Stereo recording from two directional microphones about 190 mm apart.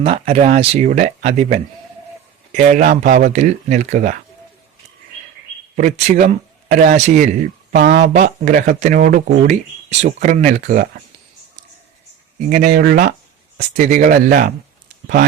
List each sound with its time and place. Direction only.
0.0 s speech: 35° right (ahead or behind)
5.7 s a man's voice: 40° right (ahead or behind)
7.7 s speech: 55° right (ahead or behind)
12.5 s speech: 45° right (ahead or behind)